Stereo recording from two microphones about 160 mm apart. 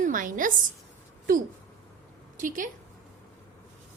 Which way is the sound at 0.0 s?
55° right (ahead or behind).